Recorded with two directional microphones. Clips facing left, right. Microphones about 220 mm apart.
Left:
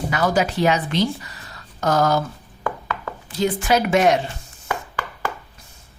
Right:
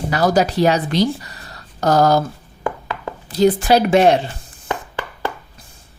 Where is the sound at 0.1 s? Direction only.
35° right (ahead or behind).